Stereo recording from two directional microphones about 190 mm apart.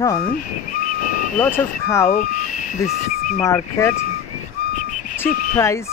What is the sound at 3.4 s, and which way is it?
Speech, 15° left (ahead or behind).